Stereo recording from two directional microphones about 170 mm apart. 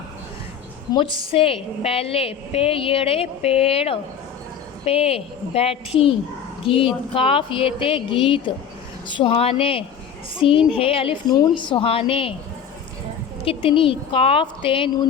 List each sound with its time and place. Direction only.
0.9 s a woman's voice: 30° left (ahead or behind)
13.4 s a woman's voice: 35° left (ahead or behind)